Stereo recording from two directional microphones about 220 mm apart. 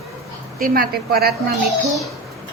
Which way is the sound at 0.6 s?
40° right (ahead or behind).